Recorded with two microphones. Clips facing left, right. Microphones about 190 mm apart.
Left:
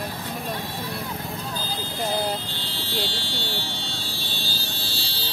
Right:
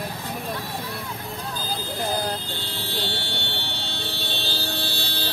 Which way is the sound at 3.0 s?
60° right (ahead or behind).